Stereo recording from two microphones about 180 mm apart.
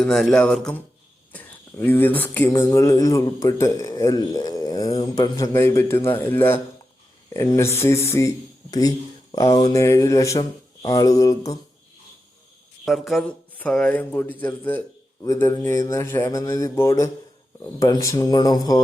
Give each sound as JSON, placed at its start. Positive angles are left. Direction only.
{"t": 0.0, "sound": "a man's voice", "side_deg": 5}
{"t": 12.8, "sound": "a man's voice", "side_deg": 0}